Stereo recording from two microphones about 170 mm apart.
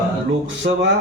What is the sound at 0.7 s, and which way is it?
Music, 60° right (ahead or behind).